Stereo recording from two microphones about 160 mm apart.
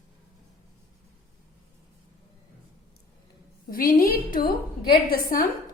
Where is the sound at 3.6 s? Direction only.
65° left (ahead or behind).